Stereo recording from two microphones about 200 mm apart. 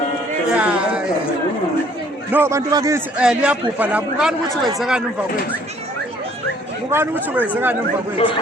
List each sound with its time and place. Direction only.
0.4 s a sound: 5° right (ahead or behind)
2.3 s a man's voice: 15° right (ahead or behind)
3.2 s speech: 5° right (ahead or behind)
6.9 s a man's voice: 10° right (ahead or behind)